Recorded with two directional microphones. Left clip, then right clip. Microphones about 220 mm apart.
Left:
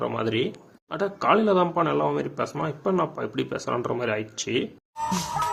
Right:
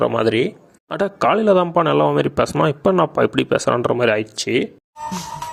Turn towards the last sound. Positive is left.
turn(degrees=0)  # may be behind; listen again after turning